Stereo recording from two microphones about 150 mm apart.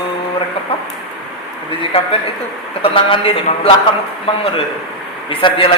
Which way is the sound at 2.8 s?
35° left (ahead or behind).